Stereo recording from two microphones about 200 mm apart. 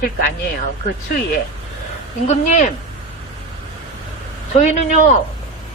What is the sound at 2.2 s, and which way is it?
Speech, 35° left (ahead or behind).